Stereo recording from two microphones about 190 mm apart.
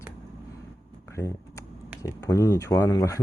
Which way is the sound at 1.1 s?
15° left (ahead or behind).